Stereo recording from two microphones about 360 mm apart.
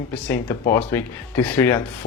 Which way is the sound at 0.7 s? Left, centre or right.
Centre.